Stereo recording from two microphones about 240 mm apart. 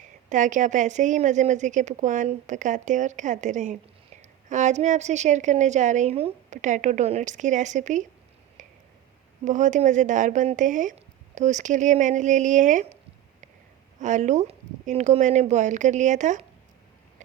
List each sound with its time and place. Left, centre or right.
0.3 s a woman's voice: right
8.6 s a sound: right
9.4 s a woman's voice: right
14.0 s a woman's voice: right